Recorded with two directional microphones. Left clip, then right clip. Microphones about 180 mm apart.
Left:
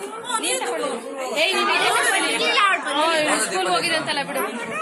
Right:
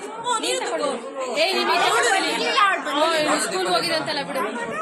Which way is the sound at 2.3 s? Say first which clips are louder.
Left 1 dB; 55° right (ahead or behind).